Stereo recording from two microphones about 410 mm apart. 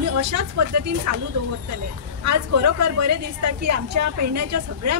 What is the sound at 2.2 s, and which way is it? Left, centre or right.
A woman's voice, right.